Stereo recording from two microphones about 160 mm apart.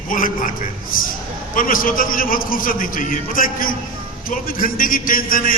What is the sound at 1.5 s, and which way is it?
A man's voice, 60° left (ahead or behind).